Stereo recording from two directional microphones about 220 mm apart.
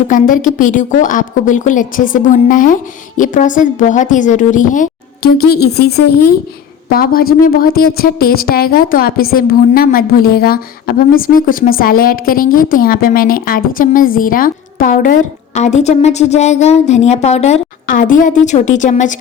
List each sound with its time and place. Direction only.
0.1 s a woman's voice: 35° left (ahead or behind)
5.5 s a woman's voice: 45° left (ahead or behind)